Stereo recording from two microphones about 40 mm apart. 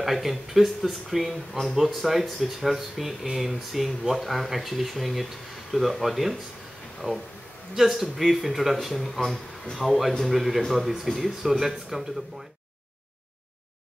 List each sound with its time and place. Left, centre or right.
0.0 s speech: centre
7.0 s speech: right
7.7 s a man's voice: centre